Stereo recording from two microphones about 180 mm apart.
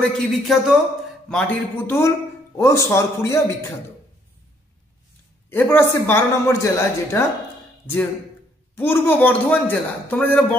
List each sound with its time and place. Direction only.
0.0 s a man's voice: centre (ahead or behind); by 3.5 s 15° left (ahead or behind)
5.5 s a man's voice: 10° left (ahead or behind)
8.7 s a man's voice: 10° left (ahead or behind)